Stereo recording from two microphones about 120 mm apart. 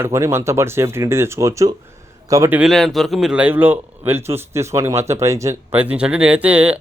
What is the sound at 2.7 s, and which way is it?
Speech, centre (ahead or behind).